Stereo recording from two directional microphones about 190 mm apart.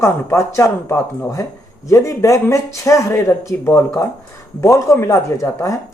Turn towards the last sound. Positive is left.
turn(degrees=15)  # may be behind; listen again after turning